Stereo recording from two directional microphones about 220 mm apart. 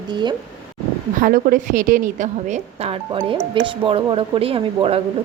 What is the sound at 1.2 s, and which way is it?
A woman's voice, 40° right (ahead or behind).